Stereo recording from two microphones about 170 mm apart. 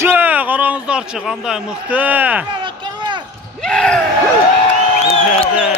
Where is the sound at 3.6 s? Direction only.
5° left (ahead or behind).